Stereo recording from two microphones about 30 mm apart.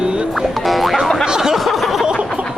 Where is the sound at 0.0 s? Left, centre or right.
Right.